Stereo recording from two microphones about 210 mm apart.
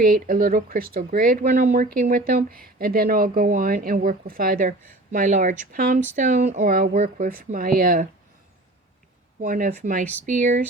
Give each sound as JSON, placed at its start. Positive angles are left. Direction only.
{"t": 0.0, "sound": "speech", "side_deg": -45}
{"t": 9.4, "sound": "speech", "side_deg": -40}